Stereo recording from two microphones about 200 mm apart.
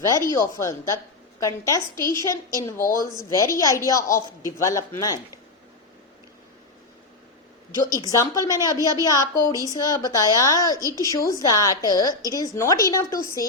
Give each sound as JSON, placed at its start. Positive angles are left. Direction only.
{"t": 0.0, "sound": "a woman's voice", "side_deg": 15}
{"t": 7.9, "sound": "a woman's voice", "side_deg": 15}
{"t": 8.8, "sound": "a woman's voice", "side_deg": -15}
{"t": 9.0, "sound": "a woman's voice", "side_deg": 15}